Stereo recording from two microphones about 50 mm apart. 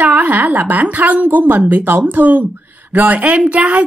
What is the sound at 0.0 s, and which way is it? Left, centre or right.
Speech, right.